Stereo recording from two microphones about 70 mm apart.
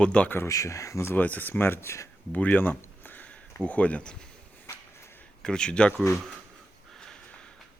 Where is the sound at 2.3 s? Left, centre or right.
Left.